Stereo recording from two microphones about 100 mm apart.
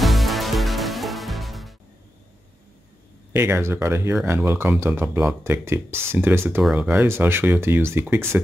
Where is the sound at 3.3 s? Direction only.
25° right (ahead or behind).